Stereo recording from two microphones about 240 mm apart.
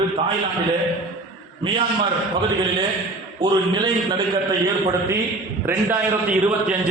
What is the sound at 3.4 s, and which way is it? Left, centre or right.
Speech, centre.